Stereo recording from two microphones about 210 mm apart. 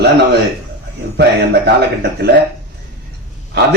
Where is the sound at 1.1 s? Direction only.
50° right (ahead or behind).